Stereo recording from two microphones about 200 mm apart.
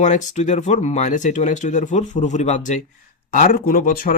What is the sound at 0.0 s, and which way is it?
Speech, 35° left (ahead or behind).